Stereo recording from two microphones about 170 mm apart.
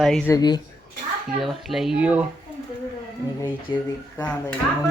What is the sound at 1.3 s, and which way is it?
Speech, centre (ahead or behind).